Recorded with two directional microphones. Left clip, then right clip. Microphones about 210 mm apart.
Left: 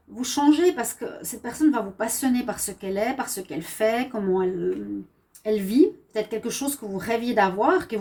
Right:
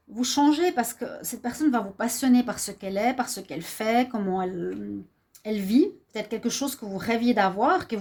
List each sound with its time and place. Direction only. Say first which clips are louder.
0.2 s a woman's voice: left 2 dB; 50° right (ahead or behind)
5.5 s a woman's voice: left 4 dB; 50° right (ahead or behind)